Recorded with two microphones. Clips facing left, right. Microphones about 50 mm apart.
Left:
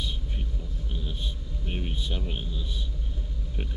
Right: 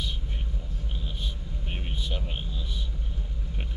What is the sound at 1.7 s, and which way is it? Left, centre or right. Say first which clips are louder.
Vehicle: left 2 dB; centre.